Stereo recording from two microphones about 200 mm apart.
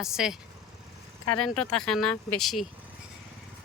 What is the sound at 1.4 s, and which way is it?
Speech, centre (ahead or behind).